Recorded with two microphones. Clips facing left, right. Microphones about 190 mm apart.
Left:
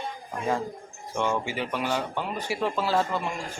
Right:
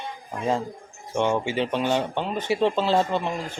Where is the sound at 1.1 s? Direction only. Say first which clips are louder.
Right 4 dB; 20° right (ahead or behind).